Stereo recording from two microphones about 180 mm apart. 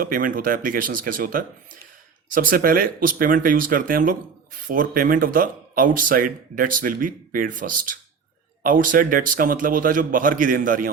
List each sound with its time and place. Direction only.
0.0 s speech: 50° right (ahead or behind)